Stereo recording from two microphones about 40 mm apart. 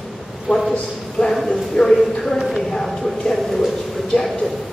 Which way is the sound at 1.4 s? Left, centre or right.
Centre.